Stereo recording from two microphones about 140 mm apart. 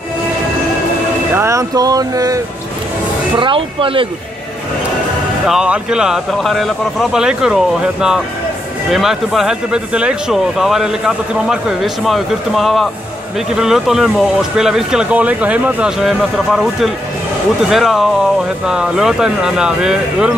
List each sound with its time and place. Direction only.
1.3 s speech: 20° right (ahead or behind)
3.3 s speech: 35° right (ahead or behind)
5.5 s speech: 5° right (ahead or behind)